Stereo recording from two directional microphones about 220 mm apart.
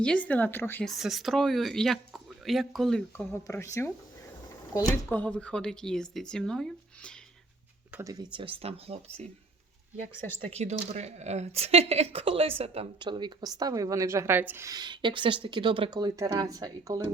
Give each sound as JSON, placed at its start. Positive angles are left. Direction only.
{"t": 0.0, "sound": "speech", "side_deg": 5}
{"t": 3.4, "sound": "speech", "side_deg": 15}
{"t": 7.9, "sound": "speech", "side_deg": -15}
{"t": 10.5, "sound": "speech", "side_deg": -30}